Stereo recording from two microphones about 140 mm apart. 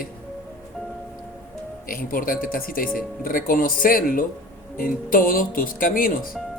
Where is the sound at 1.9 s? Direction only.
90° left.